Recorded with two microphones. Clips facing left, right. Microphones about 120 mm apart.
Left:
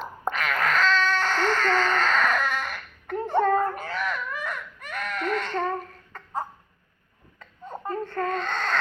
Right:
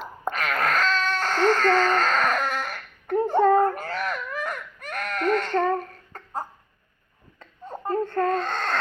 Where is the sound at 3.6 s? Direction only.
40° right (ahead or behind).